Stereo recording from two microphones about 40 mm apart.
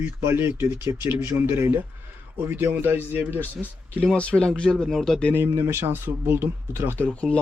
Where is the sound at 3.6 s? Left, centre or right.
Centre.